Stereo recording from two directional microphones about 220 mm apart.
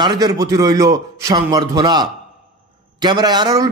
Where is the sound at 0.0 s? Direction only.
15° right (ahead or behind).